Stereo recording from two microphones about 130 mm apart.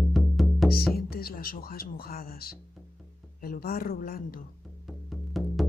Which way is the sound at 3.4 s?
90° left.